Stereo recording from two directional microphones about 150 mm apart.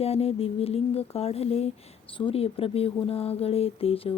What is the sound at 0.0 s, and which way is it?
Speech, 40° left (ahead or behind).